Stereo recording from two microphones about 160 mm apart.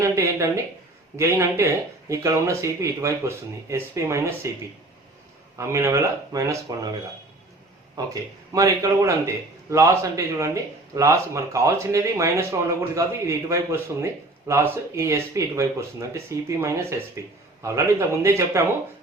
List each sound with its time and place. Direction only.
0.0 s speech: 15° right (ahead or behind)
5.5 s a man's voice: 20° right (ahead or behind)
7.9 s a man's voice: 20° right (ahead or behind)